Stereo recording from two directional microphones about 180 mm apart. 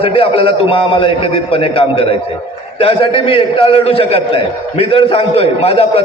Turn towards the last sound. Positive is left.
turn(degrees=35)  # may be behind; listen again after turning